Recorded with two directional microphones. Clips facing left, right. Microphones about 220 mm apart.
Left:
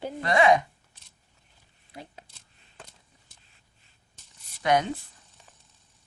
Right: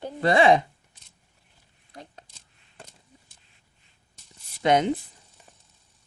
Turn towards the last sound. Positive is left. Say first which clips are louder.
# right 3 dB
turn(degrees=-20)  # may be behind; listen again after turning